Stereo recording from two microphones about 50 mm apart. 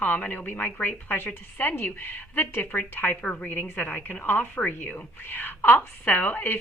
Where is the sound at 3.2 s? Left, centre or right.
Centre.